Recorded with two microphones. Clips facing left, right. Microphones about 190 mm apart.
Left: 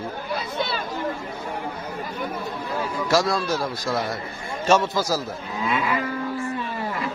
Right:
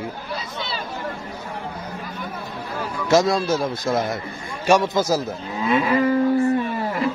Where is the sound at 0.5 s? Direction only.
55° left (ahead or behind).